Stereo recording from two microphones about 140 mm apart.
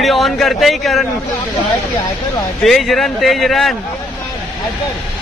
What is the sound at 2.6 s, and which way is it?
A man's voice, centre (ahead or behind).